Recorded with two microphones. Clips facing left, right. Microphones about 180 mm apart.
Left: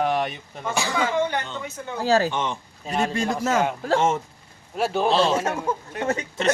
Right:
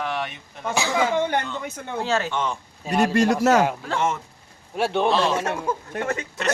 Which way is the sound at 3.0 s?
70° right (ahead or behind).